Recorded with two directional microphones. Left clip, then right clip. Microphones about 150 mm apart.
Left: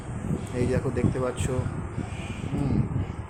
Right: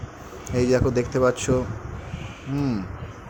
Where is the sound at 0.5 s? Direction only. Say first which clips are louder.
Right 8 dB; 40° right (ahead or behind).